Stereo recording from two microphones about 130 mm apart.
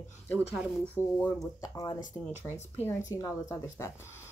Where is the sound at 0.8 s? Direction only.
10° left (ahead or behind).